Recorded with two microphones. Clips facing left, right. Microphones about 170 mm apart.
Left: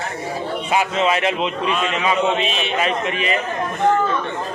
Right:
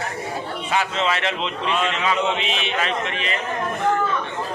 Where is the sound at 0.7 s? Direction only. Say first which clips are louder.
Left 4 dB; 15° left (ahead or behind).